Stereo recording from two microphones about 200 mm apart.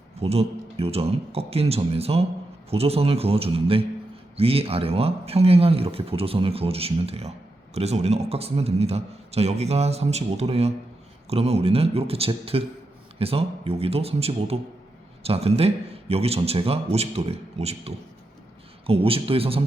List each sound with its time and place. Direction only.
0.2 s speech: 30° right (ahead or behind)